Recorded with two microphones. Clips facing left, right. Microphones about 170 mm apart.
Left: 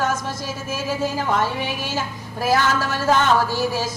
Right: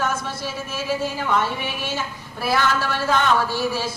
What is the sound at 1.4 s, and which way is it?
A woman's voice, 40° left (ahead or behind).